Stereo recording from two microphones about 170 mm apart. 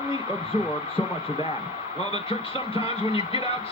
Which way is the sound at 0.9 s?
35° left (ahead or behind).